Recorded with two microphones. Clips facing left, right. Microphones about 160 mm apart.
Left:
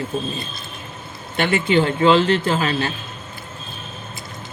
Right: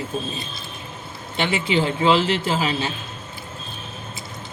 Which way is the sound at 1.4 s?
55° left (ahead or behind).